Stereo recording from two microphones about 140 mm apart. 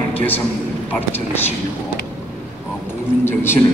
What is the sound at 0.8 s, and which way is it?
Speech, 15° left (ahead or behind).